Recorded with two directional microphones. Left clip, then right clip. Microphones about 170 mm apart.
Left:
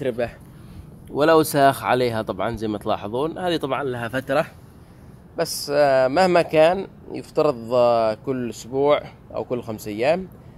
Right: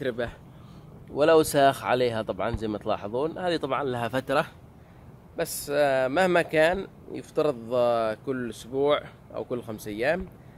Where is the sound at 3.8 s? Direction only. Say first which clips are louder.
Left 2 dB; 20° right (ahead or behind).